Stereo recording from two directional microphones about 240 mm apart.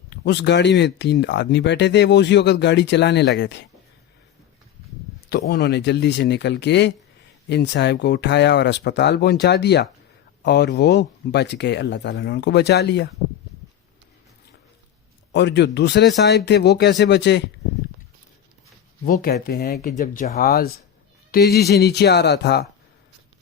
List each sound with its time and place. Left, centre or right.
0.1 s speech: left
5.3 s speech: left
15.3 s speech: left
19.0 s speech: left